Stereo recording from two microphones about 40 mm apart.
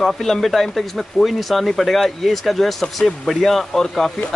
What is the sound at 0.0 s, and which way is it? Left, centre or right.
Speech, centre.